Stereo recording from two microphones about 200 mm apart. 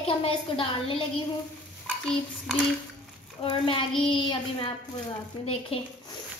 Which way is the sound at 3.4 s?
25° left (ahead or behind).